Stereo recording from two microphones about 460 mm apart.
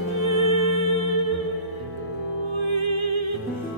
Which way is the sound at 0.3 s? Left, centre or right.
Right.